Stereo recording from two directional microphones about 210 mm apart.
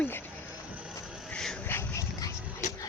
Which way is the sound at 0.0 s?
10° left (ahead or behind).